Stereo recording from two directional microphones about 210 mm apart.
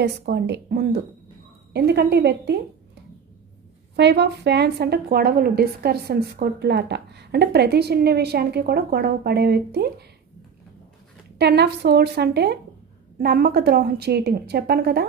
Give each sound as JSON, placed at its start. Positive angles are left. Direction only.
{"t": 0.0, "sound": "a woman's voice", "side_deg": -55}
{"t": 3.9, "sound": "a woman's voice", "side_deg": -55}
{"t": 11.3, "sound": "a woman's voice", "side_deg": -50}